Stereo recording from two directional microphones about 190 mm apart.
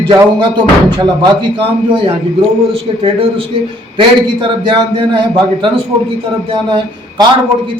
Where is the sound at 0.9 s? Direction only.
20° right (ahead or behind).